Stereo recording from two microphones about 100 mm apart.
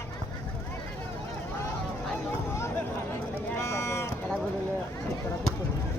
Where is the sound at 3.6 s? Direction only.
30° left (ahead or behind).